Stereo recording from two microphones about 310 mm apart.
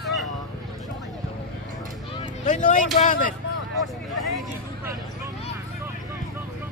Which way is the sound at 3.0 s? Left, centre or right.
Left.